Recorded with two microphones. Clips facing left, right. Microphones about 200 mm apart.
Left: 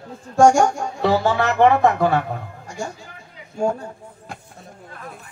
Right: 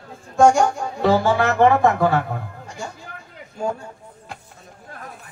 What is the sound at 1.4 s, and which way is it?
Speech, 20° left (ahead or behind).